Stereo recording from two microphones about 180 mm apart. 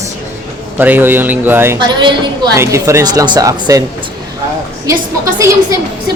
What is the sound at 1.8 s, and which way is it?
A woman's voice, 25° right (ahead or behind).